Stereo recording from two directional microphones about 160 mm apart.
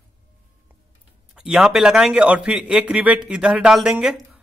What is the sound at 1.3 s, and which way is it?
A man's voice, 5° right (ahead or behind).